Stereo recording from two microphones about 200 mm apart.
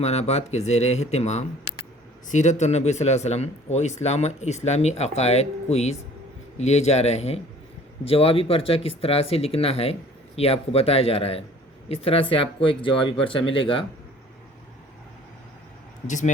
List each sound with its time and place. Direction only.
0.0 s speech: 30° left (ahead or behind)
16.0 s speech: 40° left (ahead or behind)